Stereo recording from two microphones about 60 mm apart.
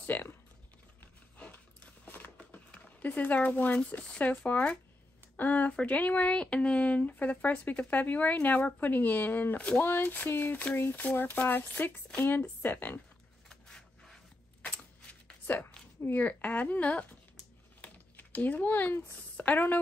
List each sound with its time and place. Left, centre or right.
0.0 s typing: left
2.0 s a sound: left
3.7 s speech: left
13.5 s rub: centre
15.4 s a sound: left
16.0 s speech: left
17.8 s typing: left
19.3 s speech: left